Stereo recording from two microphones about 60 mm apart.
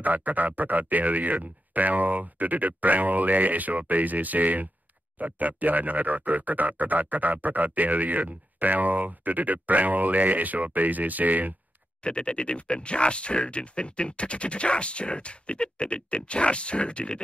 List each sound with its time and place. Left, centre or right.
0.0 s speech: right
12.0 s speech: centre